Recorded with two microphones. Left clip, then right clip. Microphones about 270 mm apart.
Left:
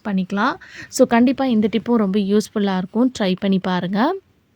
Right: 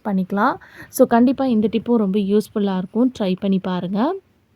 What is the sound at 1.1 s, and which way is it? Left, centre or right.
Speech, left.